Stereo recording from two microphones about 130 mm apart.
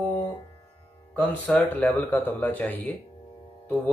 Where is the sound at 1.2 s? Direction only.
5° left (ahead or behind).